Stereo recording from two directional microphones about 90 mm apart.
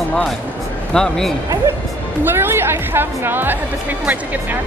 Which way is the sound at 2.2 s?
25° right (ahead or behind).